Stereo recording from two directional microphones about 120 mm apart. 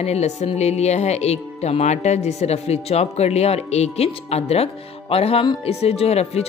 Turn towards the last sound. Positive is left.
turn(degrees=60)  # may be behind; listen again after turning